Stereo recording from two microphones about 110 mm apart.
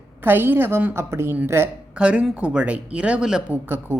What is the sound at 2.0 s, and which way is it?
A woman's voice, 10° right (ahead or behind).